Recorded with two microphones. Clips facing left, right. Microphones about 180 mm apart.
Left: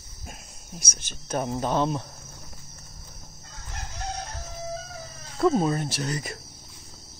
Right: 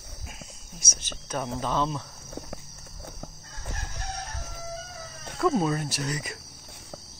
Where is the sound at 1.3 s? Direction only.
45° left (ahead or behind).